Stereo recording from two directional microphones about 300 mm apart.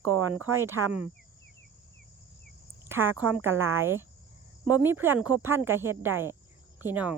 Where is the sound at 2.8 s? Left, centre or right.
Centre.